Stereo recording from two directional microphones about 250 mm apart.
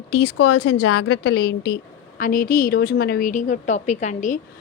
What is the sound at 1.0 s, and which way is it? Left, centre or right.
A woman's voice, left.